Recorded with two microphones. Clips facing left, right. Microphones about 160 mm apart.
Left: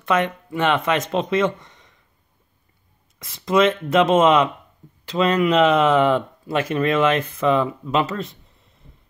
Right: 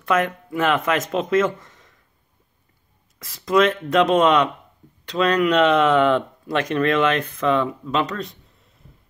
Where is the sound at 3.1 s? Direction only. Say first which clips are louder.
Even; centre (ahead or behind).